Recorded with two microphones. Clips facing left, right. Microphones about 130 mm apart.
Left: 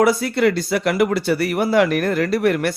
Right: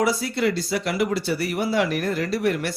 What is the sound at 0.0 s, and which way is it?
Speech, 55° left (ahead or behind).